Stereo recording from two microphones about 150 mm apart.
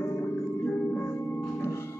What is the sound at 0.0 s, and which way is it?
Music, 15° left (ahead or behind).